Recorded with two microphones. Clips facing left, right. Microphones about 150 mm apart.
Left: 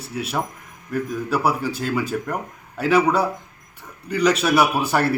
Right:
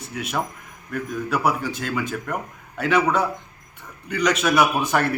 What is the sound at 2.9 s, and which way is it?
Speech, 5° left (ahead or behind).